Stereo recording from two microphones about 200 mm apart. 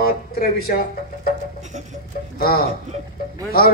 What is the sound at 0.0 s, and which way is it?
Speech, 50° left (ahead or behind).